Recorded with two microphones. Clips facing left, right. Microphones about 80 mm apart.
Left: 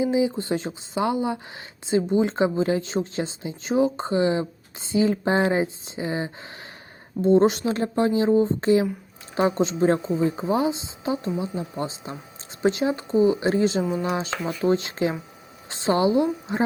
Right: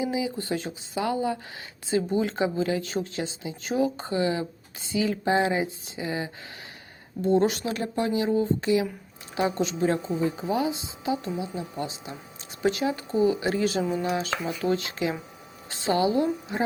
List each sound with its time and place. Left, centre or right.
0.0 s a woman's voice: left